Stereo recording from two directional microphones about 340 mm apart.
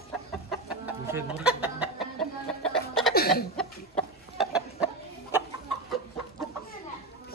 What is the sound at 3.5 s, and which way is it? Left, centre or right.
Chicken, centre.